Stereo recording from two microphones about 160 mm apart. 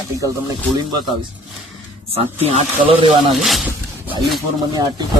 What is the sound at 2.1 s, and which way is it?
Speech, 40° right (ahead or behind).